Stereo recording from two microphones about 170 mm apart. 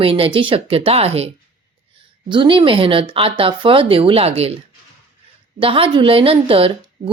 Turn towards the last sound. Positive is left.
turn(degrees=-35)  # may be behind; listen again after turning